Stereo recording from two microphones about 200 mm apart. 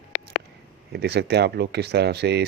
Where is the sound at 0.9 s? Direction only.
55° right (ahead or behind).